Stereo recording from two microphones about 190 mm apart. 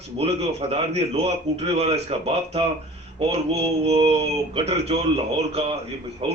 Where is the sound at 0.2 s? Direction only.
30° right (ahead or behind).